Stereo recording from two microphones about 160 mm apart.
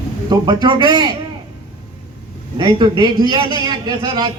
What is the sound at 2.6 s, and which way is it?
A man's voice, 30° right (ahead or behind).